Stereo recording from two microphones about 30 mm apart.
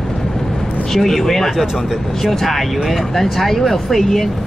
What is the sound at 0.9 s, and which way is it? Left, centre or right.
Speech, centre.